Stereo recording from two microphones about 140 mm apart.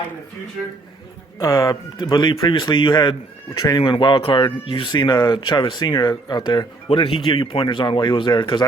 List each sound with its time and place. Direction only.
1.4 s speech: 20° left (ahead or behind)